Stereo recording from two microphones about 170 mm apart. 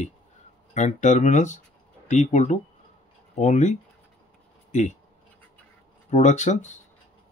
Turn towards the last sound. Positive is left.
turn(degrees=45)  # may be behind; listen again after turning